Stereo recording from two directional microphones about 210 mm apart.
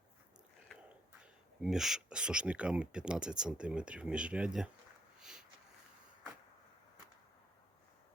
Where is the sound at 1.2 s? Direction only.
5° right (ahead or behind).